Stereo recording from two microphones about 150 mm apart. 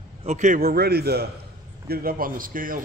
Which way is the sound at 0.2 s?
50° right (ahead or behind).